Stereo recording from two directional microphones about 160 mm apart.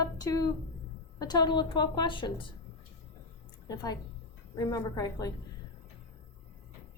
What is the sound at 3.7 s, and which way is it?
A woman's voice, 25° left (ahead or behind).